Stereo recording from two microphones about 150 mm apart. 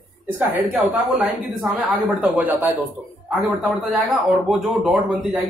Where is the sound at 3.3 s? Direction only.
Centre (ahead or behind).